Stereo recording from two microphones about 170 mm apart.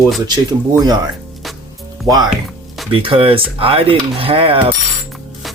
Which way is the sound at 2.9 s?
30° right (ahead or behind).